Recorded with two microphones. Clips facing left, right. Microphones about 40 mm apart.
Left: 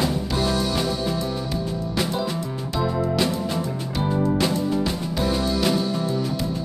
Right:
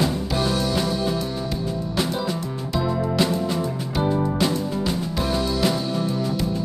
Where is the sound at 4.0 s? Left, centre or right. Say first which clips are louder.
Even; centre.